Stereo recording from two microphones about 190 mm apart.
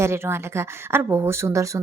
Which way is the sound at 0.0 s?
15° right (ahead or behind).